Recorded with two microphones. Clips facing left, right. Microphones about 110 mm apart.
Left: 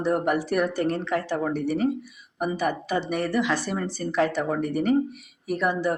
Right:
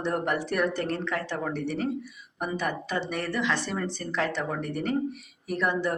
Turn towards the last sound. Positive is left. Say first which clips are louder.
# left 3 dB
turn(degrees=10)  # may be behind; listen again after turning